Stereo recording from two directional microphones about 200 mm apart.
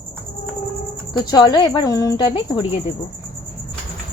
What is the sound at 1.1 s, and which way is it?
Speech, 20° left (ahead or behind).